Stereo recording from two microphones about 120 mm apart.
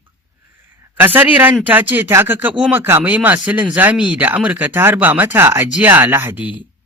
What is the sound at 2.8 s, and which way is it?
Speech, 20° right (ahead or behind).